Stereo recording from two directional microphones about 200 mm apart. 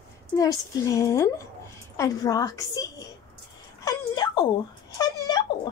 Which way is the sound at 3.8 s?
20° left (ahead or behind).